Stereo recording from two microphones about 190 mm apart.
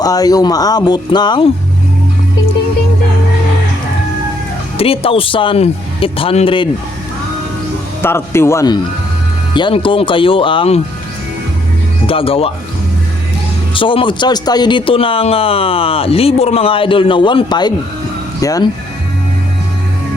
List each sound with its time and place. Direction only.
0.0 s a man's voice: 20° left (ahead or behind)
4.8 s a man's voice: 30° left (ahead or behind)
8.0 s a man's voice: 15° left (ahead or behind)
12.0 s a man's voice: 30° left (ahead or behind)
13.7 s a man's voice: 25° left (ahead or behind)